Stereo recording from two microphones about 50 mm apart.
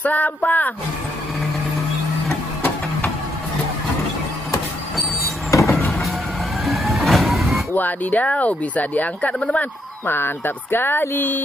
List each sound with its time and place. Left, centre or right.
0.0 s speech: left
5.5 s vehicle: left
5.9 s vehicle: centre
7.7 s speech: left
10.0 s speech: left